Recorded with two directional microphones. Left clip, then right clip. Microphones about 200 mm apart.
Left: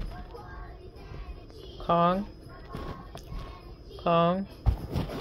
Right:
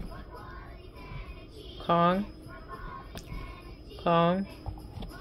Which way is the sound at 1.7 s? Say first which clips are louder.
Left 1 dB; 10° right (ahead or behind).